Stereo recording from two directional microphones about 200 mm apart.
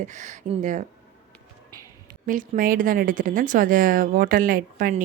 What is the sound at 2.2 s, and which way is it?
Speech, 45° right (ahead or behind).